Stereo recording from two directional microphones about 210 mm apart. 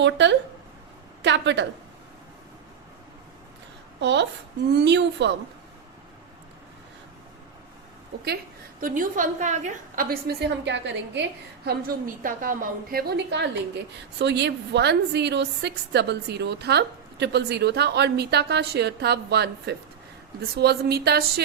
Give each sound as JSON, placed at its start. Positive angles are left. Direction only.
{"t": 0.0, "sound": "a woman's voice", "side_deg": -55}
{"t": 4.0, "sound": "a woman's voice", "side_deg": -55}
{"t": 8.8, "sound": "a woman's voice", "side_deg": -40}